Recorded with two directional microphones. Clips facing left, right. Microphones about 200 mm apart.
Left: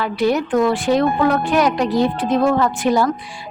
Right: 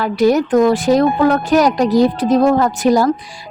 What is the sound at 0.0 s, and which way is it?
Music, 45° right (ahead or behind).